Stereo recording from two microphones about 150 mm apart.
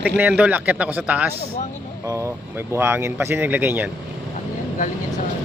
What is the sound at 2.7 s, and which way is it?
Speech, 15° right (ahead or behind).